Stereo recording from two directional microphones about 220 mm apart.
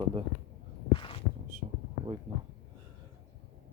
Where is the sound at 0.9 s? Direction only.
25° left (ahead or behind).